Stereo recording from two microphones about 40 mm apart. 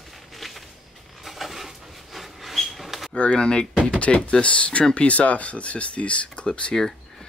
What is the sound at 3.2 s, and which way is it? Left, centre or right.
Speech, left.